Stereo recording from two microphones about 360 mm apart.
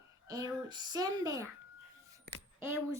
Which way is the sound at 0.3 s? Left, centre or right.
Centre.